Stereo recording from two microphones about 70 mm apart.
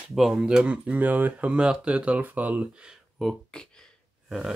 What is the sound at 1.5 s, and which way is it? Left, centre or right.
Speech, centre.